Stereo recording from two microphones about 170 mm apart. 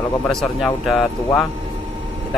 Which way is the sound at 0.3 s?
Centre (ahead or behind).